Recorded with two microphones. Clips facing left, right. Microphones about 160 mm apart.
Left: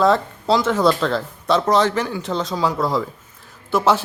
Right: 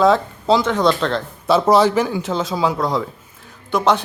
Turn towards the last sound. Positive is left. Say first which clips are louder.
# even
turn(degrees=5)  # may be behind; listen again after turning